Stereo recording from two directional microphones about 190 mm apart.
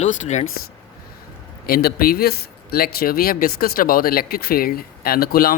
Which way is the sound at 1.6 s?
50° left (ahead or behind).